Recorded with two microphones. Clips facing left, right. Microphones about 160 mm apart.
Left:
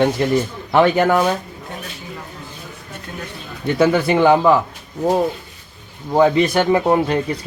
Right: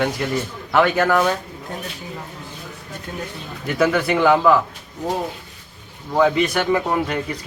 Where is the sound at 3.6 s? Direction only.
25° left (ahead or behind).